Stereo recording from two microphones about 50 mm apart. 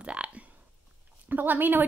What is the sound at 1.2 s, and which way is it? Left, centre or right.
Speech, right.